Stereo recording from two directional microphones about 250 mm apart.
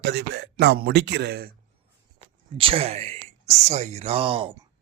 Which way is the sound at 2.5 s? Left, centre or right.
Right.